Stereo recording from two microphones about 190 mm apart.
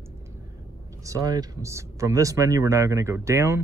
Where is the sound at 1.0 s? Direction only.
20° right (ahead or behind).